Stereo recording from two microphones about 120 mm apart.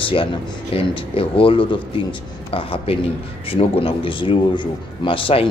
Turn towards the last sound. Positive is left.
turn(degrees=50)  # may be behind; listen again after turning